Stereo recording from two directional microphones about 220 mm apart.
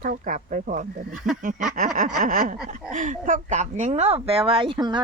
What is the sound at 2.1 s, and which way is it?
A woman's voice, 40° right (ahead or behind).